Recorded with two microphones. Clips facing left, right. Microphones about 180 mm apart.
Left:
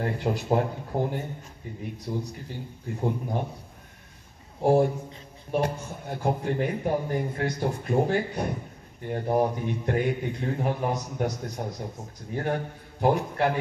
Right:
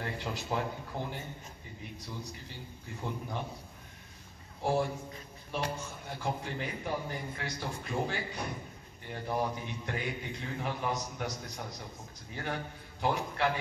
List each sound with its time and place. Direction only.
0.0 s a man's voice: 50° left (ahead or behind)
4.6 s a man's voice: 50° left (ahead or behind)
11.5 s a man's voice: 40° left (ahead or behind)